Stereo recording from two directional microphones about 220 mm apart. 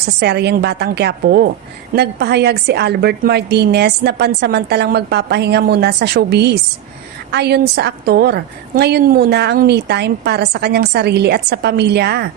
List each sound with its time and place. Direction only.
0.2 s a woman's voice: 50° right (ahead or behind)